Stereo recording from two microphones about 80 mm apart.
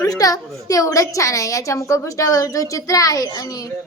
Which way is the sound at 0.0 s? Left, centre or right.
Left.